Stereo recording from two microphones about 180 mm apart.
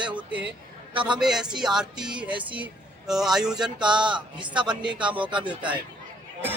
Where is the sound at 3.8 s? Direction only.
25° right (ahead or behind).